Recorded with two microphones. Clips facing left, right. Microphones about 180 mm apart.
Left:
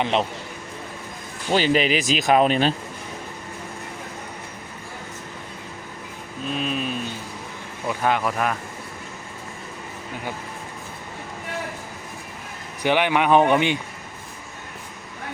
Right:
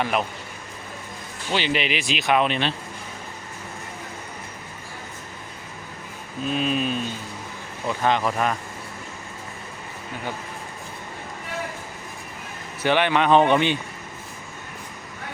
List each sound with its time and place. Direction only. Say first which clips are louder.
0.0 s speech: left 2 dB; 25° left (ahead or behind)
1.5 s speech: left 5 dB; 40° left (ahead or behind)
6.5 s speech: right 2 dB; centre (ahead or behind)
12.8 s speech: even; 15° left (ahead or behind)